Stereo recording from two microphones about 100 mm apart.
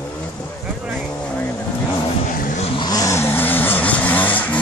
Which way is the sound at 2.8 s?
40° left (ahead or behind).